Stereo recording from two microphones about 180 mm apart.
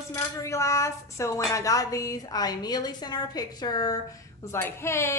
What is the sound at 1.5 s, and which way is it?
A woman's voice, 20° left (ahead or behind).